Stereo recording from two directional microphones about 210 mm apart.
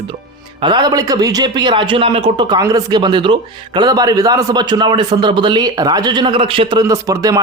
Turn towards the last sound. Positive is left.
turn(degrees=-15)  # may be behind; listen again after turning